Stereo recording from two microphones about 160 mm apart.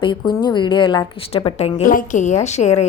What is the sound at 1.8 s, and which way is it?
A woman's voice, 55° left (ahead or behind).